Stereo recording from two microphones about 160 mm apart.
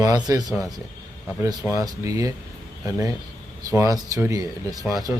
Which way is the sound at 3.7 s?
20° right (ahead or behind).